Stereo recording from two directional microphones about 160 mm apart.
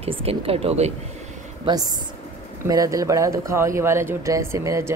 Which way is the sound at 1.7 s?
30° right (ahead or behind).